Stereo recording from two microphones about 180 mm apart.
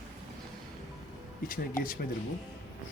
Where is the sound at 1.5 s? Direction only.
50° left (ahead or behind).